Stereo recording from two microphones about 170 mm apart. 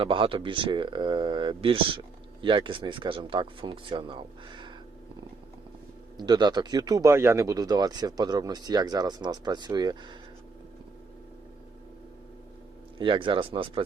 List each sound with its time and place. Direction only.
0.0 s speech: 30° right (ahead or behind)
6.1 s speech: 25° right (ahead or behind)
13.0 s speech: 30° right (ahead or behind)